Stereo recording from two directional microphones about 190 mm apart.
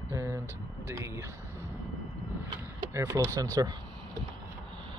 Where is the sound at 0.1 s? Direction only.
15° right (ahead or behind).